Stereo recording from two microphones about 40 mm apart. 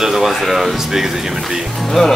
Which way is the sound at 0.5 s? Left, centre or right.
Centre.